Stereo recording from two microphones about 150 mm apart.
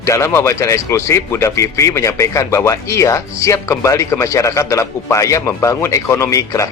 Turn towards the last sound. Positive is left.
turn(degrees=20)  # may be behind; listen again after turning